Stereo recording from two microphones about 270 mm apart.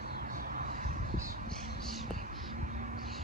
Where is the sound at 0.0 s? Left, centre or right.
Right.